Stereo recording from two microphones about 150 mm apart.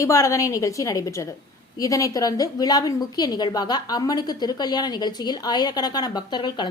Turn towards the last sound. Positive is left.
turn(degrees=30)  # may be behind; listen again after turning